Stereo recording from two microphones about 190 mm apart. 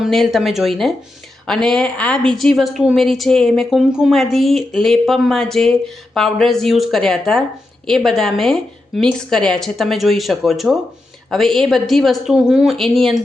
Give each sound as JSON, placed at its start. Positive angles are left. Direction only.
{"t": 0.0, "sound": "a woman's voice", "side_deg": 0}